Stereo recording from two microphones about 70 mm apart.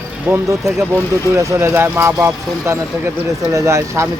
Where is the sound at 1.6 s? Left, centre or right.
Right.